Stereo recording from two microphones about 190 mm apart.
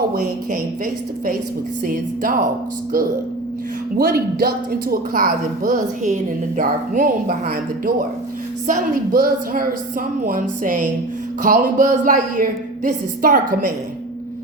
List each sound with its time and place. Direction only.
1.8 s speech: 45° right (ahead or behind)
3.9 s speech: 50° right (ahead or behind)